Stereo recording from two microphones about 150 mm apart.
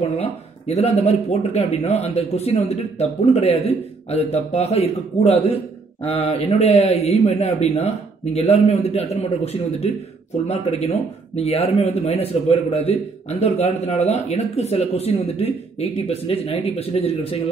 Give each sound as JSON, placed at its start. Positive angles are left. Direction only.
{"t": 0.0, "sound": "a man's voice", "side_deg": 45}